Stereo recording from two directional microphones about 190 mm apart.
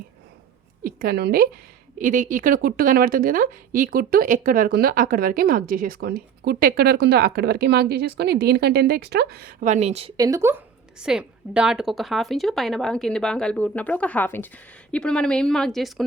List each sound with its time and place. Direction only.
0.9 s a woman's voice: 50° right (ahead or behind)
2.0 s a woman's voice: 45° right (ahead or behind)
9.6 s a woman's voice: 35° right (ahead or behind)
10.2 s a woman's voice: 15° right (ahead or behind)
11.0 s a woman's voice: 5° right (ahead or behind)